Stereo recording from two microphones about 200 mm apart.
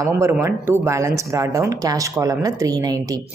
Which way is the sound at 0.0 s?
15° right (ahead or behind).